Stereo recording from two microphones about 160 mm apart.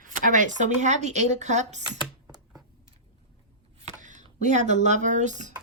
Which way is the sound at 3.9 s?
50° right (ahead or behind).